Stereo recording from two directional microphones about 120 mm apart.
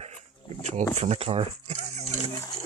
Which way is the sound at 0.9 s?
60° right (ahead or behind).